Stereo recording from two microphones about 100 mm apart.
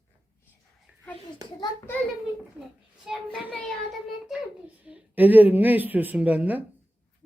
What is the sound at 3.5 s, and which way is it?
Child singing, 10° left (ahead or behind).